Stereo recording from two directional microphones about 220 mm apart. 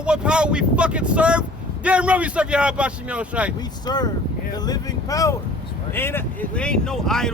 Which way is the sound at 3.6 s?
20° left (ahead or behind).